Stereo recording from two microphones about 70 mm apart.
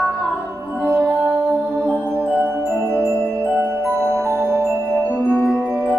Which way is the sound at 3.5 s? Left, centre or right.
Centre.